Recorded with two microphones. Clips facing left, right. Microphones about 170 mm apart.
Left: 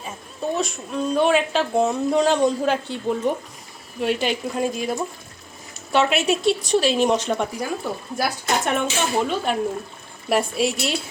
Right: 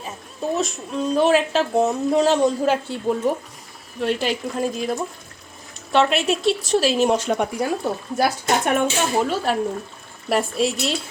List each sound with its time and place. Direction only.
0.0 s a woman's voice: centre (ahead or behind)
7.6 s speech: 25° right (ahead or behind)
8.6 s a woman's voice: 10° right (ahead or behind)